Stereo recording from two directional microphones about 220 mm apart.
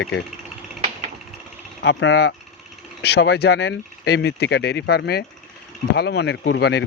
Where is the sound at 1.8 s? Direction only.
55° left (ahead or behind).